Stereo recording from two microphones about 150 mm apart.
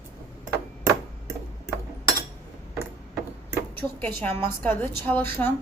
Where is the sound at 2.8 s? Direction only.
10° right (ahead or behind).